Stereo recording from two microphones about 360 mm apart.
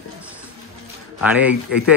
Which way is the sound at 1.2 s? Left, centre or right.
Centre.